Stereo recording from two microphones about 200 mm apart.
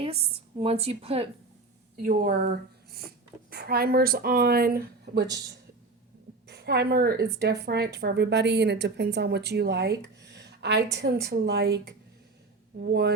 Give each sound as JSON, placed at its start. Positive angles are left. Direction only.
{"t": 0.0, "sound": "a woman's voice", "side_deg": -30}
{"t": 2.0, "sound": "speech", "side_deg": -45}
{"t": 3.5, "sound": "speech", "side_deg": -50}
{"t": 6.5, "sound": "a woman's voice", "side_deg": -55}